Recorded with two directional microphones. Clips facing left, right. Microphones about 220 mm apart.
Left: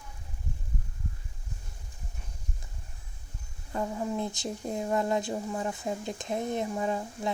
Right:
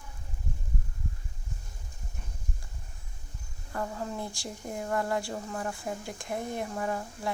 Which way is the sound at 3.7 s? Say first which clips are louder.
Left 3 dB; 15° left (ahead or behind).